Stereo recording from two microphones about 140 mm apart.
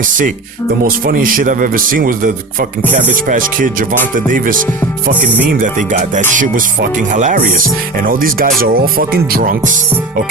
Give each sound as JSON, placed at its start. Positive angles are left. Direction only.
{"t": 0.9, "sound": "speech", "side_deg": -90}
{"t": 2.9, "sound": "speech", "side_deg": -70}
{"t": 5.5, "sound": "speech", "side_deg": -70}
{"t": 7.9, "sound": "speech", "side_deg": -90}